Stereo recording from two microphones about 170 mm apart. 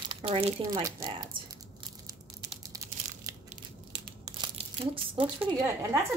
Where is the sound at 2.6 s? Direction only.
20° right (ahead or behind).